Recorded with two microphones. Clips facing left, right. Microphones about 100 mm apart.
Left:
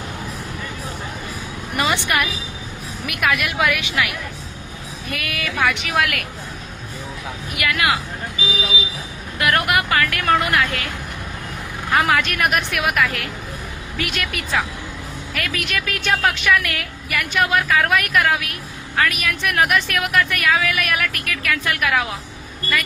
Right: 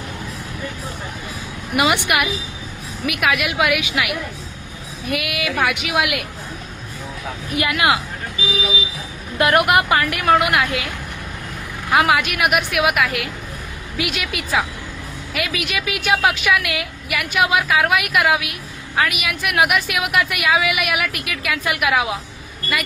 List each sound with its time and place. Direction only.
1.7 s a woman's voice: 10° right (ahead or behind)
7.5 s speech: 25° right (ahead or behind)
9.4 s a woman's voice: 20° right (ahead or behind)
11.9 s a woman's voice: 10° right (ahead or behind)